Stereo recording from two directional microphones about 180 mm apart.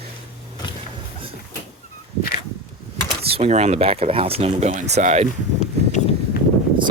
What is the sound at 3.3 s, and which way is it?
Speech, 35° right (ahead or behind).